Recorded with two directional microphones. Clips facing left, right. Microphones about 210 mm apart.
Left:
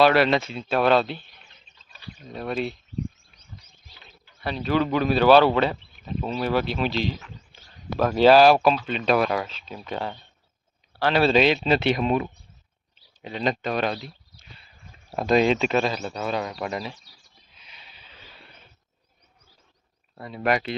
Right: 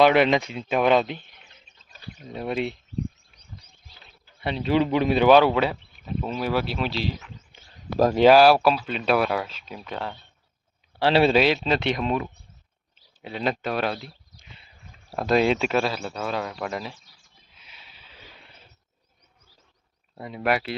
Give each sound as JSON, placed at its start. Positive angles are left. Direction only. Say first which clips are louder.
{"t": 0.0, "sound": "speech", "louder": "right 1 dB", "side_deg": -20}
{"t": 1.9, "sound": "bird", "louder": "right 1 dB", "side_deg": -45}
{"t": 2.3, "sound": "speech", "louder": "right 1 dB", "side_deg": -20}
{"t": 4.4, "sound": "speech", "louder": "right 1 dB", "side_deg": -25}
{"t": 8.1, "sound": "speech", "louder": "even", "side_deg": -15}
{"t": 11.0, "sound": "speech", "louder": "right 2 dB", "side_deg": -25}
{"t": 11.3, "sound": "speech", "louder": "left 1 dB", "side_deg": -5}
{"t": 14.3, "sound": "a sound", "louder": "even", "side_deg": -20}
{"t": 15.1, "sound": "speech", "louder": "left 1 dB", "side_deg": -5}
{"t": 17.6, "sound": "snort", "louder": "left 1 dB", "side_deg": -5}
{"t": 20.1, "sound": "speech", "louder": "left 1 dB", "side_deg": -15}